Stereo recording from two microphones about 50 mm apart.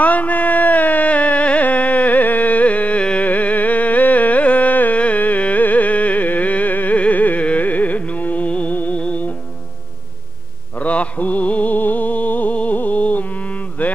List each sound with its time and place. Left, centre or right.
0.0 s a sound: left
3.3 s carnatic music: left
8.7 s music: left
10.8 s music: left